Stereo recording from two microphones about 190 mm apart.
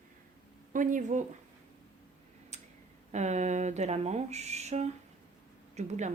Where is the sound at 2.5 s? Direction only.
35° right (ahead or behind).